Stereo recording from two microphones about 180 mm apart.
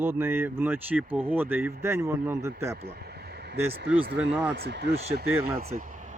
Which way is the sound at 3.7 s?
70° right (ahead or behind).